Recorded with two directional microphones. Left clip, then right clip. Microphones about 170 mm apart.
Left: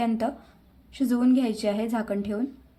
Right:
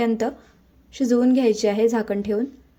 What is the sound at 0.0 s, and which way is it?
A woman's voice, 20° right (ahead or behind).